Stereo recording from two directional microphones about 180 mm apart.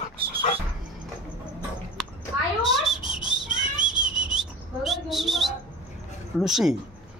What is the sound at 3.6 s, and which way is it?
Whistling, 45° right (ahead or behind).